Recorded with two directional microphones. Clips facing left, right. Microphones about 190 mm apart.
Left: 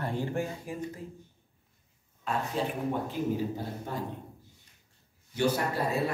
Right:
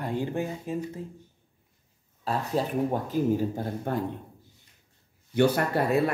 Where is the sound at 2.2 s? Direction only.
35° right (ahead or behind).